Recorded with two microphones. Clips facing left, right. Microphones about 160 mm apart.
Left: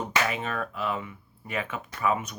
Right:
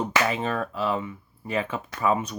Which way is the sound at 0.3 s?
30° right (ahead or behind).